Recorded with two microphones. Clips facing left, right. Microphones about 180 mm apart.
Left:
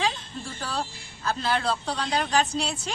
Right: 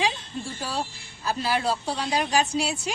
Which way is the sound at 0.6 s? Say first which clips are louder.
Left 1 dB; 10° right (ahead or behind).